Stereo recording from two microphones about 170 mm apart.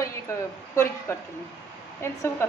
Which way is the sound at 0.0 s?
15° left (ahead or behind).